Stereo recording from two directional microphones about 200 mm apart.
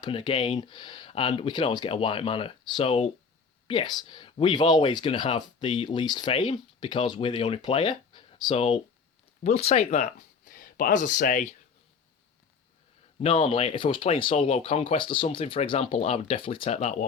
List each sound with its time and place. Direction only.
0.0 s speech: 25° left (ahead or behind); by 11.5 s 40° left (ahead or behind)
13.2 s speech: 30° left (ahead or behind)